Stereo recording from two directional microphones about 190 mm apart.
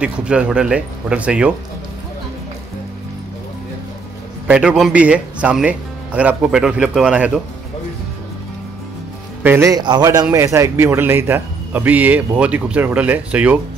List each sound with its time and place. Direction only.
0.0 s speech: 5° right (ahead or behind)
4.5 s speech: 5° right (ahead or behind)
9.4 s a man's voice: 15° right (ahead or behind)